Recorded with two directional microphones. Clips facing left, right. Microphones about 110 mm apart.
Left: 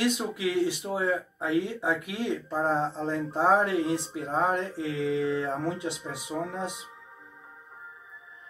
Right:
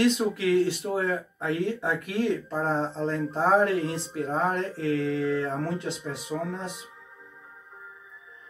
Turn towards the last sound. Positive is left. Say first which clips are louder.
# even
turn(degrees=15)  # may be behind; listen again after turning